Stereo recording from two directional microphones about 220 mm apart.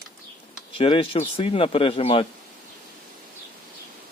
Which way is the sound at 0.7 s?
25° left (ahead or behind).